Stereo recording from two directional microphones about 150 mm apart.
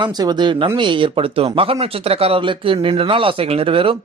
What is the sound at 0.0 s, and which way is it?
Speech, 30° right (ahead or behind).